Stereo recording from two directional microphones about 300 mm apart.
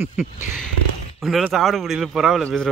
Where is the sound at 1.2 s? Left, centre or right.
Centre.